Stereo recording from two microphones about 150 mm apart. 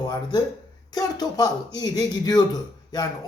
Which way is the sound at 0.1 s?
30° left (ahead or behind).